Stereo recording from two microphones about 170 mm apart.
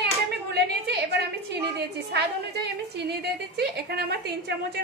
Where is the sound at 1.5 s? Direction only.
75° right (ahead or behind).